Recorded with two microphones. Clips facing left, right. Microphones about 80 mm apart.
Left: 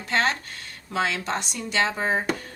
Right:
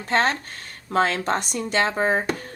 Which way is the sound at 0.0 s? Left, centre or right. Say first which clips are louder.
Right 3 dB; right.